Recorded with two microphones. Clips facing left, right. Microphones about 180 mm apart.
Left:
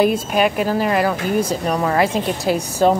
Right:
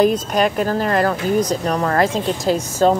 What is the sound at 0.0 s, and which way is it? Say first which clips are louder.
Speech: even; 5° left (ahead or behind).